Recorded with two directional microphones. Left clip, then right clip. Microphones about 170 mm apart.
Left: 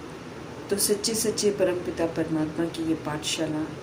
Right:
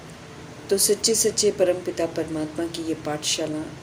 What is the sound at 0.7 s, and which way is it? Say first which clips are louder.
Speech: right 5 dB; 45° right (ahead or behind).